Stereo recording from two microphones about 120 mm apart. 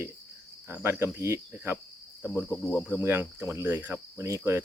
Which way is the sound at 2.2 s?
20° left (ahead or behind).